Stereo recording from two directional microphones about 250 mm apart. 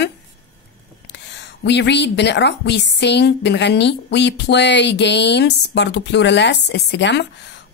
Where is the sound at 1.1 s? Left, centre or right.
Left.